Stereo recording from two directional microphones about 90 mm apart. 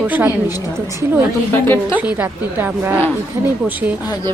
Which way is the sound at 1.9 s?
20° right (ahead or behind).